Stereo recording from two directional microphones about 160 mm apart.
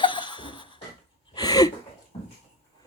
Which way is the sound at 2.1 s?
35° left (ahead or behind).